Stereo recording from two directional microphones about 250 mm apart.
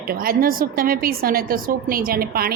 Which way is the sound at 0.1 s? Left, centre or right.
Right.